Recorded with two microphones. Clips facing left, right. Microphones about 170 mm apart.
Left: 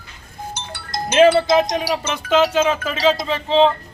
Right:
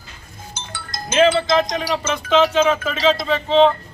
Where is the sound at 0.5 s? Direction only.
70° left (ahead or behind).